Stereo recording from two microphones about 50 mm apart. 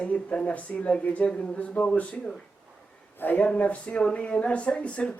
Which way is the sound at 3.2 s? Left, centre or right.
Left.